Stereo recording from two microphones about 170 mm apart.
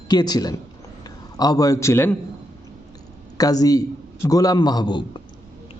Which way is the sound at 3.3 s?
20° left (ahead or behind).